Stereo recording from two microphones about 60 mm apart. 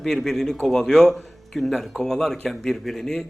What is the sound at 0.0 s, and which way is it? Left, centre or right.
A man's voice, centre.